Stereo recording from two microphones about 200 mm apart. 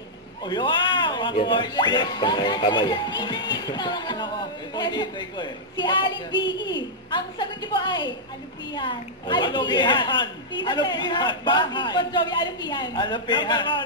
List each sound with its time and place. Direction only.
0.5 s a woman's voice: 20° left (ahead or behind)